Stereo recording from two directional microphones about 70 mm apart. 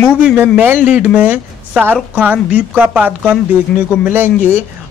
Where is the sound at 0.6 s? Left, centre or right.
Right.